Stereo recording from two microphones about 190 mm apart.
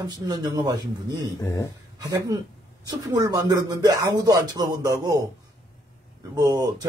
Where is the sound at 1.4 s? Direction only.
15° left (ahead or behind).